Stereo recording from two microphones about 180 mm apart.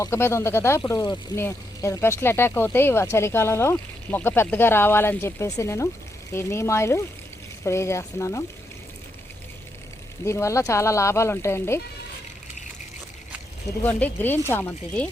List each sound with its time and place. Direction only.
0.0 s speech: 15° left (ahead or behind)
10.2 s speech: 15° left (ahead or behind)
13.7 s speech: 10° left (ahead or behind)